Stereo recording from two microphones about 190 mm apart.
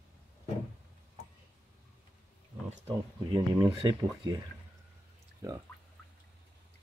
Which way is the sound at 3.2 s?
25° right (ahead or behind).